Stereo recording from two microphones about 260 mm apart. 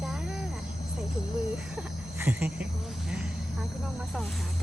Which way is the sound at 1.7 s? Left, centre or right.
Centre.